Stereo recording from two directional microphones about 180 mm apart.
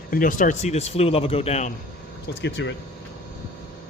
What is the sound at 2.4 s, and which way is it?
Speech, 90° left.